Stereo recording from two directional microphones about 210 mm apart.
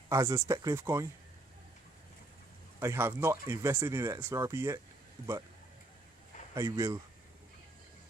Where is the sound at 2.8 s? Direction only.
10° right (ahead or behind).